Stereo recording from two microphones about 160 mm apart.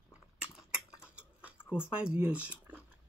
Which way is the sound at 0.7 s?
5° right (ahead or behind).